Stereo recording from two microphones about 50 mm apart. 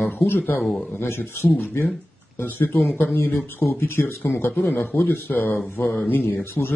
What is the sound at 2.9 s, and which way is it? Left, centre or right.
Speech, left.